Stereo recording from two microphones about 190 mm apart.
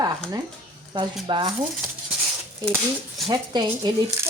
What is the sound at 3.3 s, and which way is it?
Speech, 20° right (ahead or behind).